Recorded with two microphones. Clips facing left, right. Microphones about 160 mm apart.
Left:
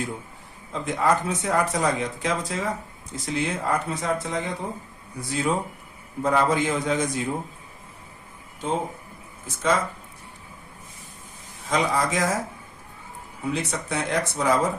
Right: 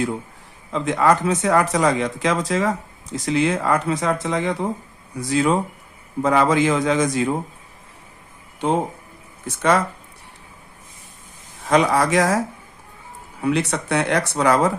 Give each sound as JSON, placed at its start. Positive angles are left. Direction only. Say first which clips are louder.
{"t": 0.7, "sound": "speech", "louder": "right 5 dB", "side_deg": -90}
{"t": 8.6, "sound": "speech", "louder": "right 6 dB", "side_deg": -75}
{"t": 11.6, "sound": "speech", "louder": "right 6 dB", "side_deg": -70}
{"t": 13.4, "sound": "speech", "louder": "right 7 dB", "side_deg": -75}